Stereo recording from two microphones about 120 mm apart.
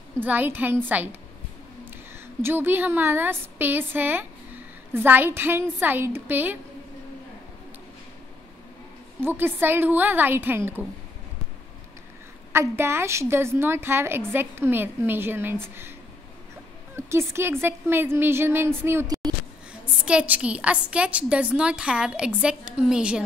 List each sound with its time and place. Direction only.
0.2 s a woman's voice: 15° right (ahead or behind)
2.4 s a woman's voice: 15° right (ahead or behind)
9.2 s a woman's voice: 20° right (ahead or behind)
12.5 s a woman's voice: 20° right (ahead or behind)
16.9 s a woman's voice: 20° right (ahead or behind)
19.0 s a sound: 30° right (ahead or behind)
19.7 s a woman's voice: 10° right (ahead or behind)